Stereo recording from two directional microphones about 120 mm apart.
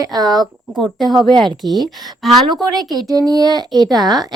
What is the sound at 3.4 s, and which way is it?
Speech, 35° right (ahead or behind).